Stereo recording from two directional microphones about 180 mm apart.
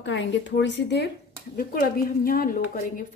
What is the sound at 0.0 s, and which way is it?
A woman's voice, 90° left.